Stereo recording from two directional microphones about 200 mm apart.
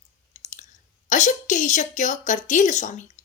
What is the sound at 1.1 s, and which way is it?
A woman's voice, 40° left (ahead or behind).